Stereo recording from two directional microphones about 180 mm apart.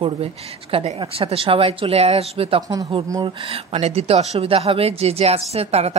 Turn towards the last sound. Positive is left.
turn(degrees=-35)  # may be behind; listen again after turning